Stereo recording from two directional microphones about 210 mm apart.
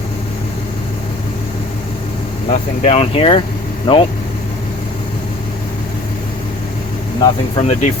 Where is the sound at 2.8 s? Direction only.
30° left (ahead or behind).